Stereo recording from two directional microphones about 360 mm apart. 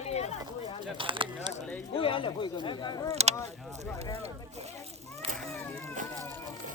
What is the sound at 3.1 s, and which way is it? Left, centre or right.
Speech, centre.